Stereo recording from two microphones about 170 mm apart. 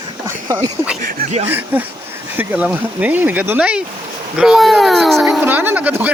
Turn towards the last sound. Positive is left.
turn(degrees=-10)  # may be behind; listen again after turning